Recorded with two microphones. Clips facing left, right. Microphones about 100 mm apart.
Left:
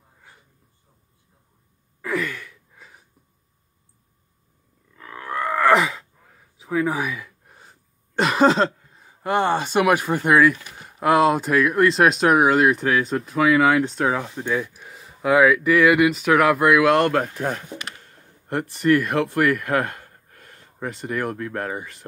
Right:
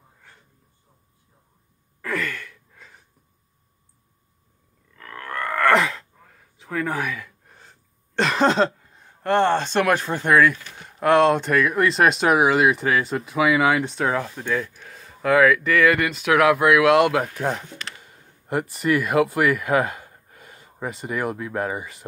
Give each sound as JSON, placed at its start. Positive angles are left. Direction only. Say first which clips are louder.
{"t": 2.0, "sound": "a sound", "louder": "left 2 dB", "side_deg": 5}
{"t": 4.9, "sound": "groan", "louder": "left 3 dB", "side_deg": 10}
{"t": 8.2, "sound": "speech", "louder": "left 2 dB", "side_deg": 5}
{"t": 14.2, "sound": "speech", "louder": "left 1 dB", "side_deg": 15}